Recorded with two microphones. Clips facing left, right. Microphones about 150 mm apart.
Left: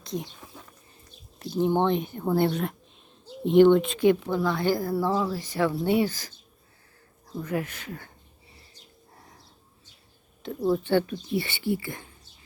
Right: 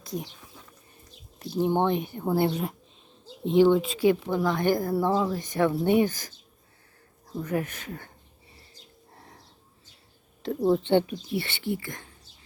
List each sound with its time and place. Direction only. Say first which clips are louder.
1.5 s a woman's voice: left 1 dB; 15° right (ahead or behind)
4.0 s a woman's voice: left 1 dB; 15° right (ahead or behind)
7.4 s speech: right 1 dB; 40° right (ahead or behind)
10.4 s speech: right 2 dB; 35° right (ahead or behind)
11.3 s speech: left 2 dB; centre (ahead or behind)